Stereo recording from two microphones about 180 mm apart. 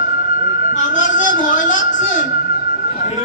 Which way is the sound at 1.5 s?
45° left (ahead or behind).